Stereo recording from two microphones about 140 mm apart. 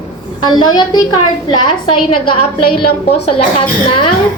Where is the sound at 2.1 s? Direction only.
40° left (ahead or behind).